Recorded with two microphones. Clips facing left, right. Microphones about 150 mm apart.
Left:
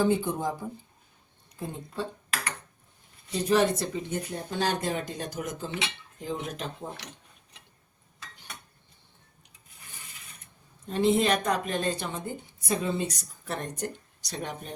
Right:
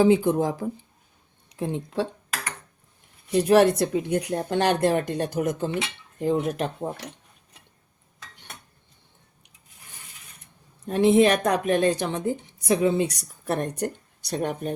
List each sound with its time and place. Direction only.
0.0 s speech: 90° right
3.3 s speech: 70° right (ahead or behind)
5.8 s cutlery: 50° right (ahead or behind)
10.8 s a woman's voice: 65° right (ahead or behind)